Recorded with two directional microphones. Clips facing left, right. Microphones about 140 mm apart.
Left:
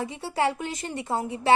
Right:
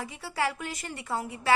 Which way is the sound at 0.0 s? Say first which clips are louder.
Left 5 dB; 25° left (ahead or behind).